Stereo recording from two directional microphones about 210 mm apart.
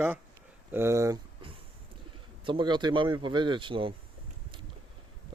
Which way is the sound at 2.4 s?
25° right (ahead or behind).